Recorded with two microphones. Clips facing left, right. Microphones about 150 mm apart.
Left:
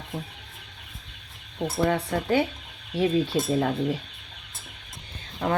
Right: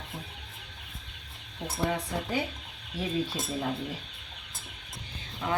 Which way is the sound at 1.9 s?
70° left (ahead or behind).